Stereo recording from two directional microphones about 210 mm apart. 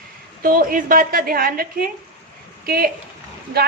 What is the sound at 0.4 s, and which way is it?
Speech, 40° right (ahead or behind).